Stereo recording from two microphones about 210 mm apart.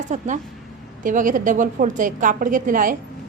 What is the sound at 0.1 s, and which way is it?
A woman's voice, 35° right (ahead or behind).